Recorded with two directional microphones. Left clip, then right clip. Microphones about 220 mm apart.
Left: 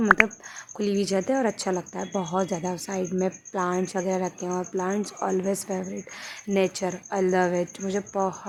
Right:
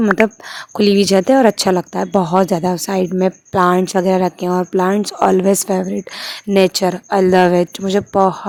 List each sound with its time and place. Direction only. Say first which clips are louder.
0.8 s speech: right 13 dB; 40° right (ahead or behind)